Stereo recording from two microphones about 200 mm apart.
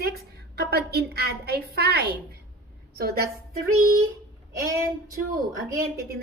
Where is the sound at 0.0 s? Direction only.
50° right (ahead or behind).